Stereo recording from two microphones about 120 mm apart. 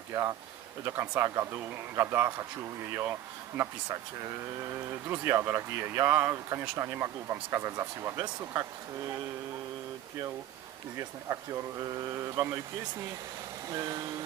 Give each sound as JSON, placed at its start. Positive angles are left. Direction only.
{"t": 0.1, "sound": "speech", "side_deg": -25}
{"t": 11.0, "sound": "speech", "side_deg": -25}
{"t": 13.7, "sound": "speech", "side_deg": -30}